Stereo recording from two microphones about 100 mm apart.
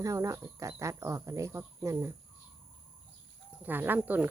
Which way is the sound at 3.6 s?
20° right (ahead or behind).